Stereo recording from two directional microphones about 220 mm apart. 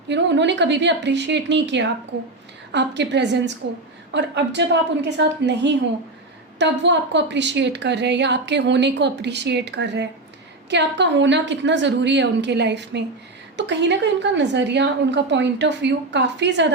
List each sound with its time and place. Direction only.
0.1 s a woman's voice: 55° right (ahead or behind)